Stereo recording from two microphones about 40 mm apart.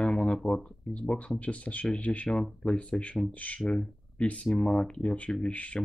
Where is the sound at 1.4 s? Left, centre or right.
Left.